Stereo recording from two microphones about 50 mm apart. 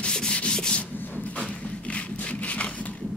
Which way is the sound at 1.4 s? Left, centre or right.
Left.